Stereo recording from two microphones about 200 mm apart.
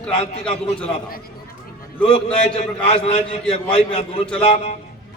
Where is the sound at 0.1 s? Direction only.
30° left (ahead or behind).